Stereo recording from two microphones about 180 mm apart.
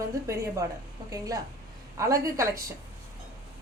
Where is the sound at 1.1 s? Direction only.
20° right (ahead or behind).